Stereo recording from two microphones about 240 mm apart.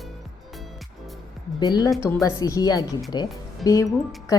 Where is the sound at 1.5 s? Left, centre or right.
Centre.